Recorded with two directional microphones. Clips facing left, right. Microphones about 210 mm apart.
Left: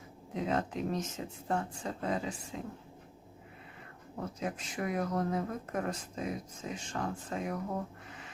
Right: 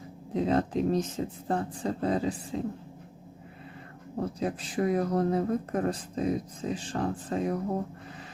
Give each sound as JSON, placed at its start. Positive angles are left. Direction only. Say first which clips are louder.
{"t": 0.3, "sound": "speech", "louder": "right 7 dB", "side_deg": -35}
{"t": 4.4, "sound": "speech", "louder": "right 7 dB", "side_deg": -35}